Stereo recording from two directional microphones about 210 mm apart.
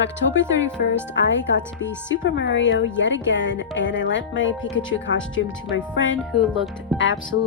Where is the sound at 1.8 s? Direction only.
60° left (ahead or behind).